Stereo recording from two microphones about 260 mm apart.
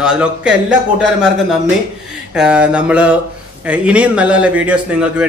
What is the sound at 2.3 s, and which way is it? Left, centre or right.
A man's voice, centre.